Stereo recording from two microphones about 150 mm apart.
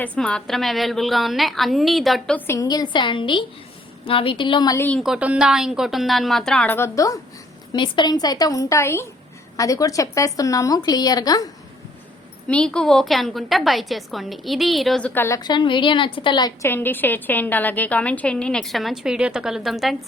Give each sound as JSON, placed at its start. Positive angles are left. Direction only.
{"t": 0.2, "sound": "a woman's voice", "side_deg": 5}
{"t": 2.5, "sound": "a woman's voice", "side_deg": 25}
{"t": 4.8, "sound": "a woman's voice", "side_deg": 10}
{"t": 5.0, "sound": "a woman's voice", "side_deg": -5}
{"t": 12.5, "sound": "a woman's voice", "side_deg": 5}
{"t": 15.1, "sound": "a woman's voice", "side_deg": 15}
{"t": 15.4, "sound": "a woman's voice", "side_deg": 30}
{"t": 16.6, "sound": "a woman's voice", "side_deg": 15}